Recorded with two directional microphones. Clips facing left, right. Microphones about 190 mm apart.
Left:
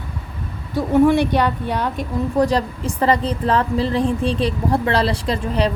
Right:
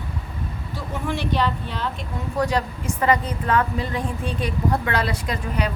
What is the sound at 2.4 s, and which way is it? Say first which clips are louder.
Speech: left 4 dB; 35° left (ahead or behind).